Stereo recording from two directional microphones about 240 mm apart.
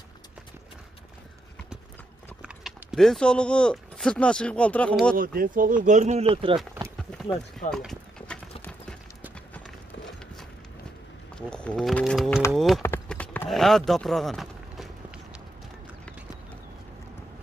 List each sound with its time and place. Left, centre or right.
2.4 s speech: centre
5.1 s speech: right
7.0 s run: centre
7.7 s clip-clop: centre
11.3 s speech: centre
12.8 s clip-clop: centre